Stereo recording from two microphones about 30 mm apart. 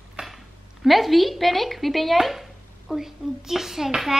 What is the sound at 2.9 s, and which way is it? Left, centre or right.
Speech, centre.